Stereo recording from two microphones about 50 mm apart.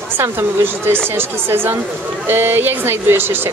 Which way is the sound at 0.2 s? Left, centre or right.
Right.